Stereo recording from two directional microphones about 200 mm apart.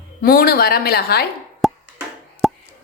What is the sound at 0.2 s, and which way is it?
A woman's voice, 45° left (ahead or behind).